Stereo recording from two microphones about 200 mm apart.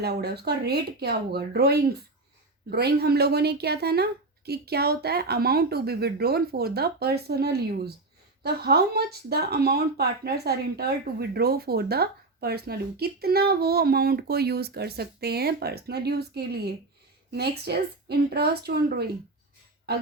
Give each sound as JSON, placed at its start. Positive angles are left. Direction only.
{"t": 0.0, "sound": "speech", "side_deg": -55}